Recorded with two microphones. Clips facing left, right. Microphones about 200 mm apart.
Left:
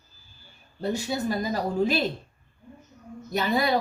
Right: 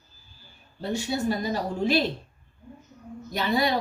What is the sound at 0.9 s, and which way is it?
Speech, 40° left (ahead or behind).